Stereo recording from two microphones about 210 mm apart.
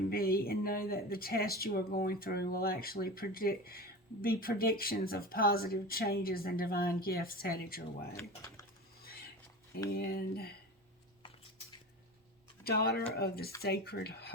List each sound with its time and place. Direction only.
0.1 s speech: 45° left (ahead or behind)
8.1 s speech: 15° left (ahead or behind)
9.9 s speech: 45° left (ahead or behind)
12.6 s speech: 50° left (ahead or behind)